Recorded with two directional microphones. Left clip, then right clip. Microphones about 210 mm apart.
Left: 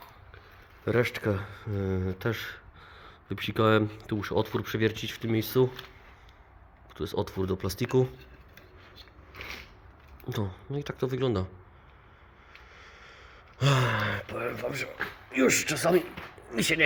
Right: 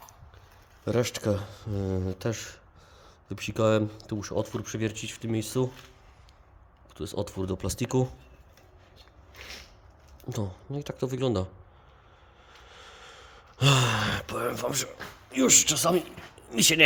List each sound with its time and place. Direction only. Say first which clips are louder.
0.9 s speech: even; 25° right (ahead or behind)
6.9 s speech: left 2 dB; 15° right (ahead or behind)
10.2 s speech: left 1 dB; 20° right (ahead or behind)
12.6 s a sound: right 5 dB; 40° right (ahead or behind)
15.4 s speech: right 2 dB; 25° right (ahead or behind)
16.5 s speech: right 4 dB; 40° right (ahead or behind)